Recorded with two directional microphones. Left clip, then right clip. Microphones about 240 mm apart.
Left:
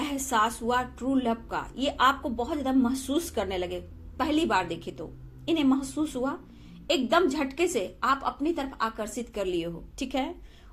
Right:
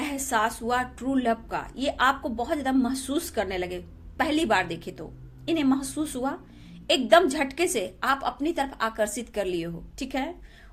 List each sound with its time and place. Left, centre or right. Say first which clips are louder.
0.0 s a woman's voice: even; centre